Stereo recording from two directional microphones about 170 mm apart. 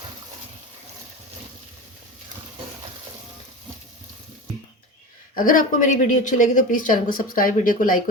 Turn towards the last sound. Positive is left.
turn(degrees=55)  # may be behind; listen again after turning